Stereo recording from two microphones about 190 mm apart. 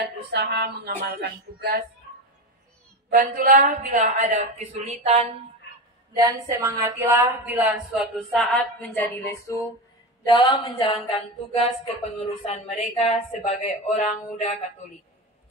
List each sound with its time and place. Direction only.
0.0 s speech: 60° right (ahead or behind)
3.1 s a woman's voice: 45° right (ahead or behind)
6.1 s speech: 20° right (ahead or behind); by 8.9 s centre (ahead or behind)
8.9 s a sound: 15° left (ahead or behind)
10.2 s a woman's voice: 25° left (ahead or behind)